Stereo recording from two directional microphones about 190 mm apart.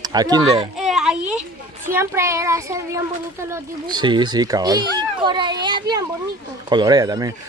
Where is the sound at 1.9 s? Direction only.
15° right (ahead or behind).